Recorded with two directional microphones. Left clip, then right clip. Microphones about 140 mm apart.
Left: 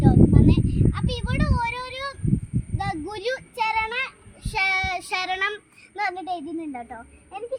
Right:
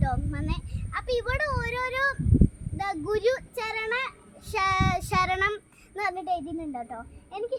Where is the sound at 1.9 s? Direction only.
10° right (ahead or behind).